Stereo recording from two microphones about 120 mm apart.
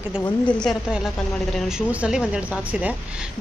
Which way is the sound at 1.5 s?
5° right (ahead or behind).